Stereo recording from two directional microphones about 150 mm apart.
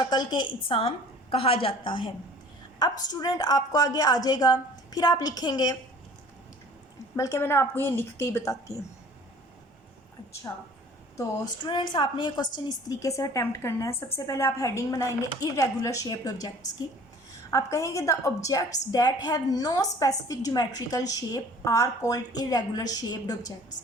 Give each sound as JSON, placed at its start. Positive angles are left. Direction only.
{"t": 0.1, "sound": "a woman's voice", "side_deg": 30}
{"t": 7.2, "sound": "a woman's voice", "side_deg": 20}
{"t": 10.5, "sound": "a woman's voice", "side_deg": 20}
{"t": 17.5, "sound": "a woman's voice", "side_deg": 20}